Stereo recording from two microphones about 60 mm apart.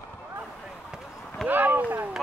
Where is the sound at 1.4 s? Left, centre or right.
Right.